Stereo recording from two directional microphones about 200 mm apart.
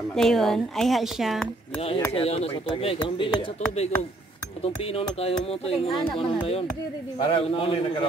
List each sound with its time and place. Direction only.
0.1 s a woman's voice: centre (ahead or behind)
2.1 s speech: 30° left (ahead or behind)
4.9 s speech: 30° left (ahead or behind)
7.2 s speech: 25° left (ahead or behind)